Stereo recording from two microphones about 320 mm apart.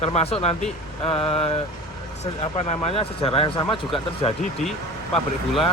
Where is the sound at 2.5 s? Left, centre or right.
Centre.